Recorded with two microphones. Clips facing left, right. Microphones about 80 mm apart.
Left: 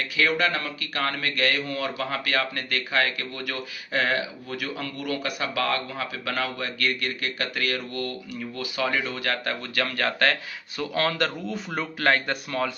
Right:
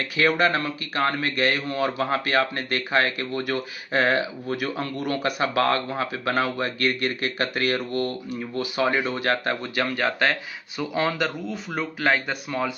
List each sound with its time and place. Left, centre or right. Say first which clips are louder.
0.2 s speech: right 3 dB; right; by 12.7 s centre